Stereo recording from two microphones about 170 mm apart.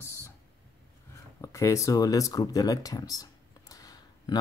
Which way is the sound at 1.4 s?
20° left (ahead or behind).